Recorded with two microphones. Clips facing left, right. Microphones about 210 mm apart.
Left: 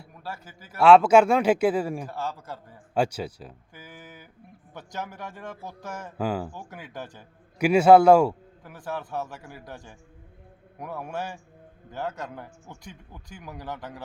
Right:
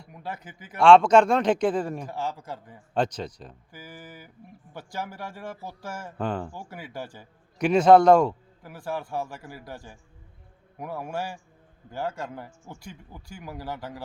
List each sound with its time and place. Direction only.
0.2 s speech: 20° right (ahead or behind)
0.8 s speech: 5° left (ahead or behind)
2.0 s speech: 15° right (ahead or behind)
2.9 s speech: 10° left (ahead or behind)
3.7 s speech: 5° right (ahead or behind)
6.1 s speech: 5° left (ahead or behind)
6.5 s speech: 10° right (ahead or behind)
7.6 s speech: 10° left (ahead or behind)
8.6 s speech: 10° right (ahead or behind)